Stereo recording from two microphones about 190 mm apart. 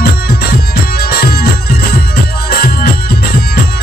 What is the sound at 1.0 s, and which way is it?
Music, 55° left (ahead or behind).